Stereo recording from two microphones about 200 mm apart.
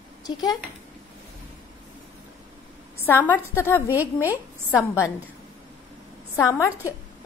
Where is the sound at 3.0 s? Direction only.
10° left (ahead or behind).